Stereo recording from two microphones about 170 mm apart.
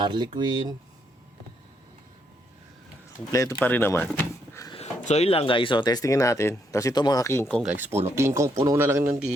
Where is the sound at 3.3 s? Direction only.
20° left (ahead or behind).